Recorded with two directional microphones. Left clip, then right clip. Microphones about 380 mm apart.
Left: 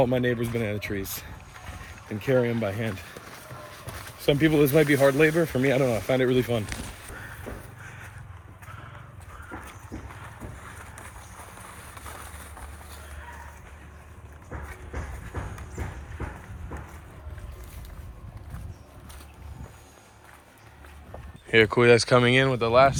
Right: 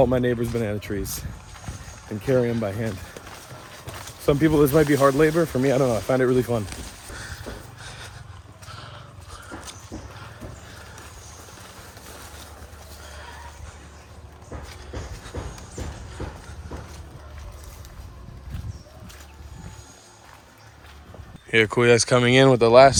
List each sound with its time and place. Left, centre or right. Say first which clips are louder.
0.3 s speech: right 3 dB; centre
0.7 s speech: right 2 dB; right
2.1 s speech: right 2 dB; centre
4.3 s speech: right 3 dB; centre
15.3 s a sound: right 1 dB; centre
21.5 s speech: right 1 dB; centre